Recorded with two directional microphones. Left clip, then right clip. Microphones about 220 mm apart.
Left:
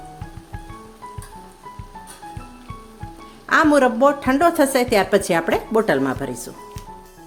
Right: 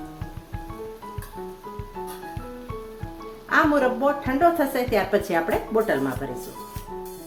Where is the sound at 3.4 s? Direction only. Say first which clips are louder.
Left 5 dB; 50° left (ahead or behind).